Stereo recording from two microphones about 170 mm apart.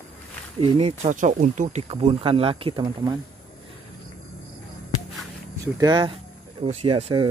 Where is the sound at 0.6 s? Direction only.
30° right (ahead or behind).